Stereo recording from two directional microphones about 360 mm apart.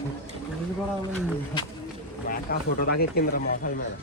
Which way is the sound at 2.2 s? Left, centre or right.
Left.